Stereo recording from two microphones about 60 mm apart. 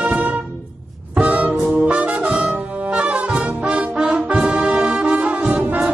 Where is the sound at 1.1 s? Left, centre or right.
Right.